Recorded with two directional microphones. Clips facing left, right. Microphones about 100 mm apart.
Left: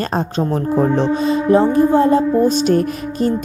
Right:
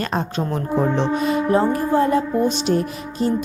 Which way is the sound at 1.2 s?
25° left (ahead or behind).